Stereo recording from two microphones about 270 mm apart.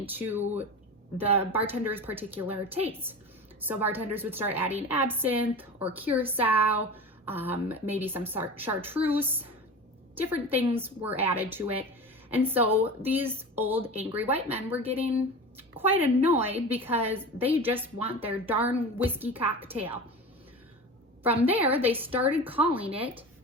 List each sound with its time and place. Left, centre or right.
0.1 s a woman's voice: centre
21.2 s a woman's voice: centre
22.6 s a woman's voice: right